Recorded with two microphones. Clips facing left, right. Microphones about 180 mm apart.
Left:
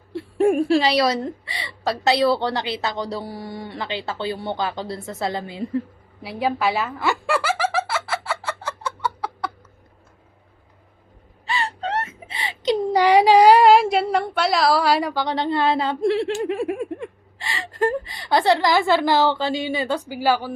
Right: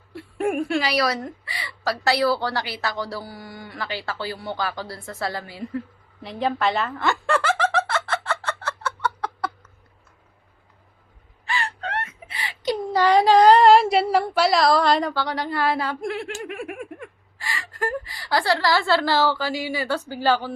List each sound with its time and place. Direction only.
0.1 s a woman's voice: 30° left (ahead or behind)
6.2 s snicker: 5° left (ahead or behind)
11.5 s gasp: 20° left (ahead or behind)
11.9 s speech: 25° left (ahead or behind)
20.0 s a woman's voice: 10° left (ahead or behind)